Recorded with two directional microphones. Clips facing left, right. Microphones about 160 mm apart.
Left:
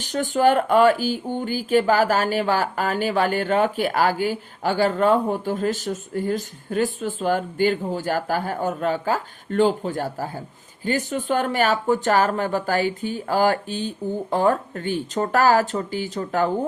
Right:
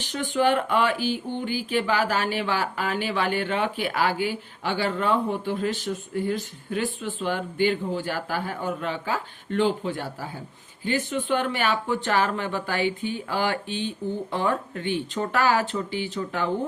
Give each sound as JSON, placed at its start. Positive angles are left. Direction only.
{"t": 0.0, "sound": "speech", "side_deg": 40}